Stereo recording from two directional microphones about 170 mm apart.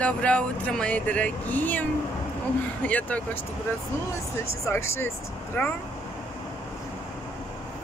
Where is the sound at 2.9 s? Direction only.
10° left (ahead or behind).